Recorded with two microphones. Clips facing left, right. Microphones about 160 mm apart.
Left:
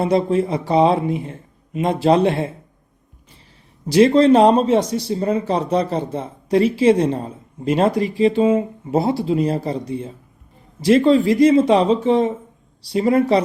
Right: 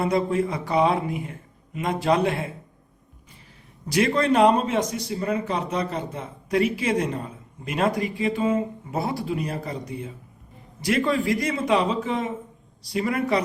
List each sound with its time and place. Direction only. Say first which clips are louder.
0.0 s speech: left 5 dB; 30° left (ahead or behind)
3.8 s speech: left 9 dB; 25° left (ahead or behind)